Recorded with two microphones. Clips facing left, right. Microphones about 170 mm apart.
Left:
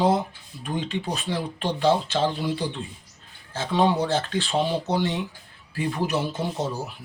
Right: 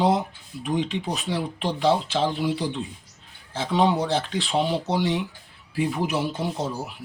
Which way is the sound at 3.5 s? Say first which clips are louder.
Even; 15° right (ahead or behind).